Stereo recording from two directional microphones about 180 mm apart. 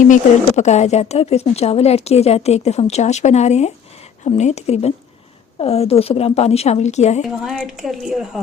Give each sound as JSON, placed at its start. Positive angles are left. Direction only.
{"t": 0.0, "sound": "speech", "side_deg": 40}
{"t": 7.4, "sound": "a woman's voice", "side_deg": 0}